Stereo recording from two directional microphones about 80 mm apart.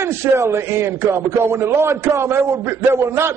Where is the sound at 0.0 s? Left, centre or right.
Right.